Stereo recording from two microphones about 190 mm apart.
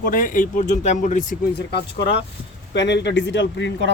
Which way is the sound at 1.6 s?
60° left (ahead or behind).